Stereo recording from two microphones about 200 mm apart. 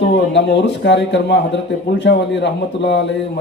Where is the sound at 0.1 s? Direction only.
65° left (ahead or behind).